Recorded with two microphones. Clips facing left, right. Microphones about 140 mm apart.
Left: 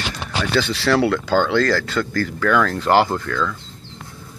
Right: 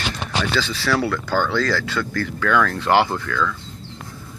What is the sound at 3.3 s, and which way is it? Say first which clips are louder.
Speech: left 1 dB; 40° left (ahead or behind).